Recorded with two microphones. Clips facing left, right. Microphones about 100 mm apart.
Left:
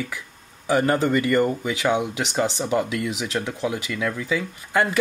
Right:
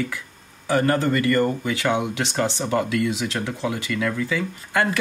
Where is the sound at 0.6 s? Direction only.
15° left (ahead or behind).